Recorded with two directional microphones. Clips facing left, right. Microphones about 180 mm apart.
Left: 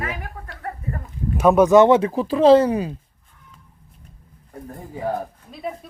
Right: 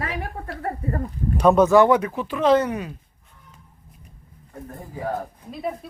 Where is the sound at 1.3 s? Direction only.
5° left (ahead or behind).